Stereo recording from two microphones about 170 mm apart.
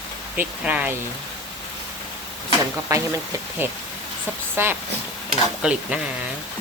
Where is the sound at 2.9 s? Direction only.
20° right (ahead or behind).